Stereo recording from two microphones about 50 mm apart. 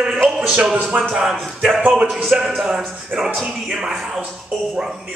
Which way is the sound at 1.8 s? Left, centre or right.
Right.